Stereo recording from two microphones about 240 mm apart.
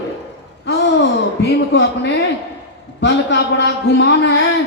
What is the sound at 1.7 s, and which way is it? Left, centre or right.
A man's voice, left.